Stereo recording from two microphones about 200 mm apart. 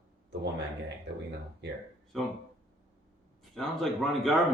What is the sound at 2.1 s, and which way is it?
Speech, centre (ahead or behind).